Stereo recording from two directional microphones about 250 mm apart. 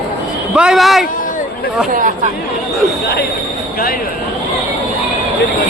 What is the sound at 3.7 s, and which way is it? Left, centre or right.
Speech, left.